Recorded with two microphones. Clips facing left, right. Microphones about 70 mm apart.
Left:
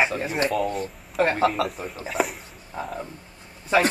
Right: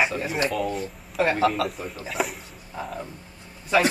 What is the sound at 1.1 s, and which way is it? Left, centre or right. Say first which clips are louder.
Speech: left 1 dB; left.